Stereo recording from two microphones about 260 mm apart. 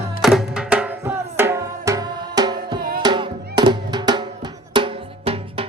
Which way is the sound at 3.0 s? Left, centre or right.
Centre.